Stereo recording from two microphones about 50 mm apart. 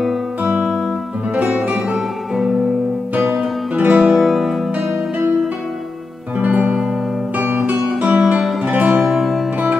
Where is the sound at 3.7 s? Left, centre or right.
Right.